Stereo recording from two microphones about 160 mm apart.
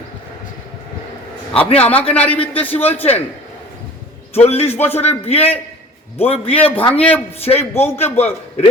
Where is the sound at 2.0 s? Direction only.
10° left (ahead or behind).